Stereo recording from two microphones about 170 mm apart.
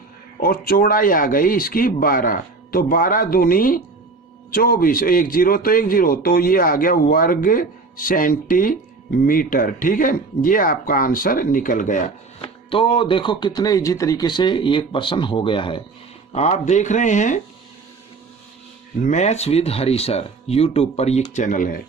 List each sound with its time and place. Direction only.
0.3 s a man's voice: 60° left (ahead or behind)
12.4 s speech: 30° left (ahead or behind)
16.3 s speech: 45° left (ahead or behind)
19.0 s speech: 45° left (ahead or behind)